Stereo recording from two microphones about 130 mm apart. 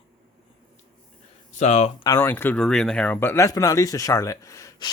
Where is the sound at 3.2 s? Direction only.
20° left (ahead or behind).